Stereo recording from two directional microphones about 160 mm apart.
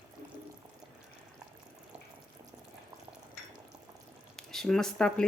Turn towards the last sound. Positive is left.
turn(degrees=5)  # may be behind; listen again after turning